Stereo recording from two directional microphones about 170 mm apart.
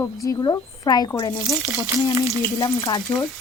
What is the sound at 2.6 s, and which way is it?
Speech, 25° left (ahead or behind).